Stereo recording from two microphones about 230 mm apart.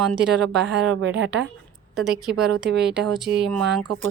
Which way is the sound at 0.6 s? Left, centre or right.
Right.